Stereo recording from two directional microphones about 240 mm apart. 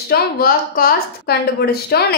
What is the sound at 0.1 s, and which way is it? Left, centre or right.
A woman's voice, left.